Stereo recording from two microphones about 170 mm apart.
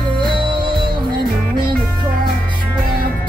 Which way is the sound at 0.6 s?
25° right (ahead or behind).